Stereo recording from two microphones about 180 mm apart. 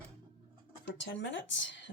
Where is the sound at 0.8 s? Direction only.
90° left.